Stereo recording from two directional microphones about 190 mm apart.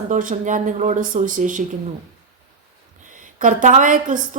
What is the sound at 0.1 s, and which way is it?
A woman's voice, 45° right (ahead or behind).